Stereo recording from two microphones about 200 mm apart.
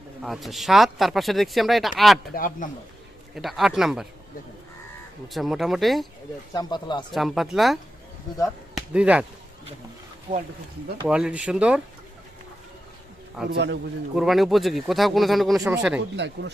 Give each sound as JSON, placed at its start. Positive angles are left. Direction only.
{"t": 0.2, "sound": "speech", "side_deg": 0}
{"t": 2.3, "sound": "speech", "side_deg": 45}
{"t": 3.3, "sound": "speech", "side_deg": 0}
{"t": 5.3, "sound": "speech", "side_deg": 0}
{"t": 6.5, "sound": "speech", "side_deg": 20}
{"t": 7.1, "sound": "speech", "side_deg": 0}
{"t": 10.3, "sound": "speech", "side_deg": -30}
{"t": 11.0, "sound": "speech", "side_deg": -5}
{"t": 13.5, "sound": "speech", "side_deg": -60}
{"t": 14.2, "sound": "speech", "side_deg": 0}
{"t": 16.0, "sound": "speech", "side_deg": -60}